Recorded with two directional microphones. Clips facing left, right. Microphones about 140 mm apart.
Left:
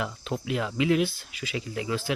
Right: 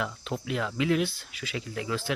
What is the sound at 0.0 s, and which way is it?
Speech, centre (ahead or behind).